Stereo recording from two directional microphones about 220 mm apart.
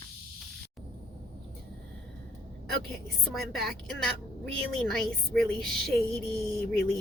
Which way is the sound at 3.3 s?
Centre (ahead or behind).